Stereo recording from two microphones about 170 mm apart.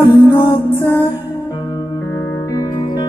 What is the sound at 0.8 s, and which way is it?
Music, 15° left (ahead or behind).